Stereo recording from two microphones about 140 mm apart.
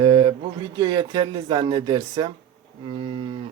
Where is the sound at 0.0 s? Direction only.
30° right (ahead or behind).